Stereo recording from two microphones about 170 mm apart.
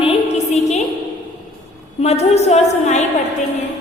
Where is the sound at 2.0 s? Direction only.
40° left (ahead or behind).